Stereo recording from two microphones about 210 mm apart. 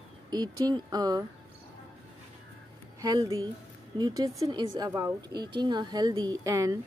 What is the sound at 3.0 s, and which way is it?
Speech, 15° right (ahead or behind).